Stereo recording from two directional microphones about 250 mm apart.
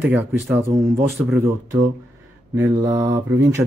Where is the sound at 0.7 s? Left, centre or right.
Right.